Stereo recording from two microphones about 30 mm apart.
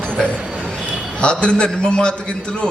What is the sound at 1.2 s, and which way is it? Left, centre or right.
A man's voice, left.